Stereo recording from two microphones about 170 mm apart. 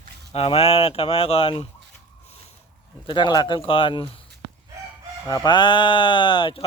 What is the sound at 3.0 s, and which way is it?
A man's voice, 25° left (ahead or behind).